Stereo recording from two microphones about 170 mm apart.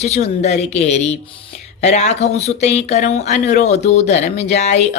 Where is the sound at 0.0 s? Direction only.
40° left (ahead or behind).